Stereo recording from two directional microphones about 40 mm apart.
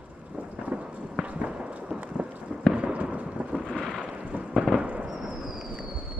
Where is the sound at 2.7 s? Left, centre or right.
Right.